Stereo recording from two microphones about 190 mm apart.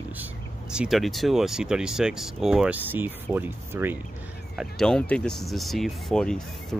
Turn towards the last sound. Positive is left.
turn(degrees=5)  # may be behind; listen again after turning